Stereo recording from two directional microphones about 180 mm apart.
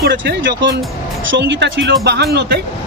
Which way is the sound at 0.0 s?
80° right.